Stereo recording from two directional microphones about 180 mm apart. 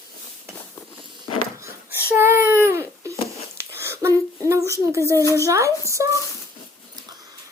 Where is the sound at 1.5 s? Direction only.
15° right (ahead or behind).